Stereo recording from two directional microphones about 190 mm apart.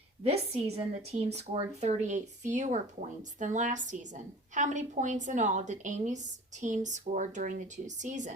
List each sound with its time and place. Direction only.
0.2 s a woman's voice: 30° right (ahead or behind)